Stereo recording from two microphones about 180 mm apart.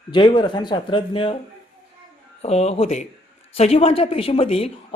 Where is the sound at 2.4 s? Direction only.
35° left (ahead or behind).